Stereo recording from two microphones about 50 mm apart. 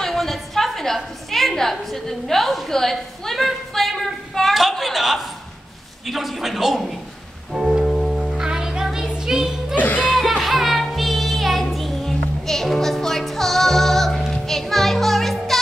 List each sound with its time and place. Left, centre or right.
0.0 s a sound: centre
6.0 s a man's voice: centre
7.5 s music: centre
8.4 s music: centre
9.8 s music: left
10.0 s music: centre